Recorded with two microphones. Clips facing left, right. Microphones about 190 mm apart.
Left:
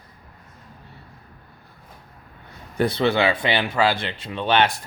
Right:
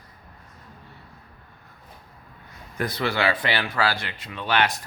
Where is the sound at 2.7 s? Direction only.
30° left (ahead or behind).